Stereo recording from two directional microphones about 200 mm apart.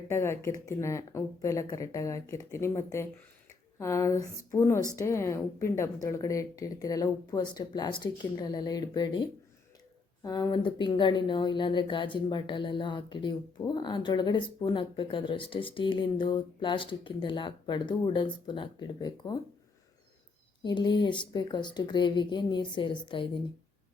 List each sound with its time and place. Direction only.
0.1 s a woman's voice: 15° left (ahead or behind)
10.2 s speech: 15° left (ahead or behind)
20.7 s speech: 20° left (ahead or behind)